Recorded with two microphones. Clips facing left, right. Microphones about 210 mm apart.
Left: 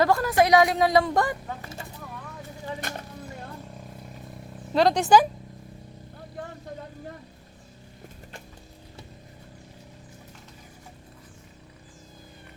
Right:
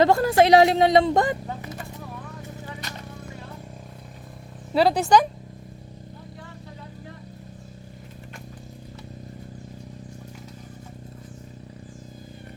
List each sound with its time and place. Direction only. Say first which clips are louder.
0.0 s speech: right 4 dB; 25° right (ahead or behind)
2.8 s a sound: left 3 dB; 50° left (ahead or behind)
4.7 s speech: even; 5° right (ahead or behind)